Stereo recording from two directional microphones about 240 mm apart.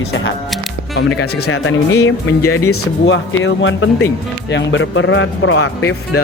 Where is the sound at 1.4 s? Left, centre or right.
Left.